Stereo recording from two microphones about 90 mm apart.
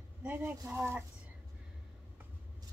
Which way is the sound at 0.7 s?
30° right (ahead or behind).